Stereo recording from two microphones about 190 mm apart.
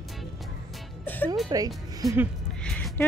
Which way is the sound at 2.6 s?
5° left (ahead or behind).